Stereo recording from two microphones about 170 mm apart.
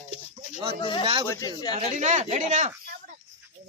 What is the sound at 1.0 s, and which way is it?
Speech, 35° right (ahead or behind).